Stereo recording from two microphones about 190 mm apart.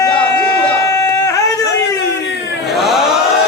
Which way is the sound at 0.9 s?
20° left (ahead or behind).